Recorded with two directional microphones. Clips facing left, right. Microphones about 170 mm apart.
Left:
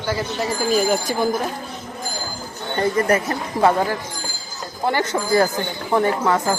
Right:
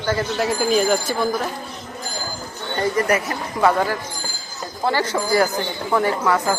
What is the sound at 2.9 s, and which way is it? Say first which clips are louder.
Speech: left 1 dB; 30° left (ahead or behind).